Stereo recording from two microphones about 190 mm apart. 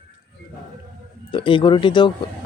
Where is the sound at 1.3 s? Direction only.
25° left (ahead or behind).